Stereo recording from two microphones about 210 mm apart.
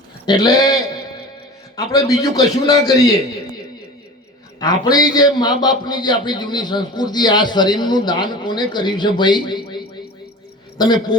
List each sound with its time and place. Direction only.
0.3 s a man's voice: 20° left (ahead or behind)
4.6 s a man's voice: 20° left (ahead or behind)